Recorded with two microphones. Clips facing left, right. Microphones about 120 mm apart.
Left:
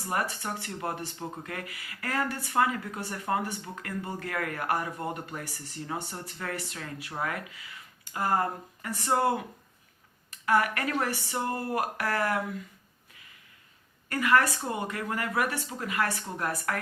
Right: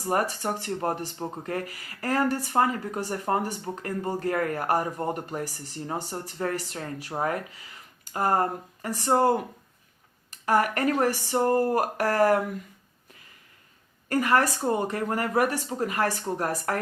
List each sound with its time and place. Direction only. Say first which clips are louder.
0.0 s speech: right 5 dB; 40° right (ahead or behind)
10.4 s speech: right 3 dB; 40° right (ahead or behind)
14.1 s speech: right 2 dB; 40° right (ahead or behind)